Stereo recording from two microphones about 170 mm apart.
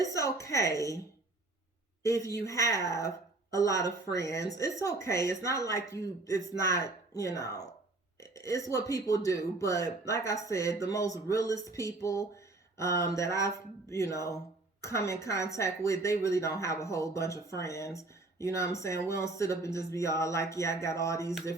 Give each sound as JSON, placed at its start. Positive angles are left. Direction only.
{"t": 0.0, "sound": "speech", "side_deg": 20}
{"t": 2.0, "sound": "speech", "side_deg": 20}